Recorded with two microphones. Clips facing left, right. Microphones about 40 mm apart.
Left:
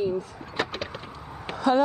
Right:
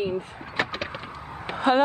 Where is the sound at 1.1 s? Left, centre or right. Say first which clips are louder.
Right 2 dB; right.